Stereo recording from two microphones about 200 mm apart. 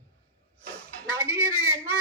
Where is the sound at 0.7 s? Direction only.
5° left (ahead or behind).